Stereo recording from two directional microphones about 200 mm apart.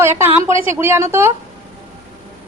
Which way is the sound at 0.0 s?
10° right (ahead or behind).